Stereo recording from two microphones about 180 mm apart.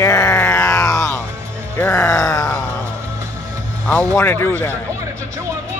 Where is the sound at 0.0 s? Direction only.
15° left (ahead or behind).